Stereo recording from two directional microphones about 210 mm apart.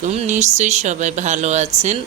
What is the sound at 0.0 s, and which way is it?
Speech, 35° right (ahead or behind).